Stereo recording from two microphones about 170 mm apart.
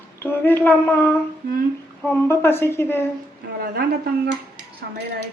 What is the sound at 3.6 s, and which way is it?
Speech, 65° right (ahead or behind).